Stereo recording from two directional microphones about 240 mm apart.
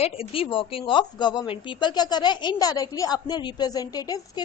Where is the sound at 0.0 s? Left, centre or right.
Left.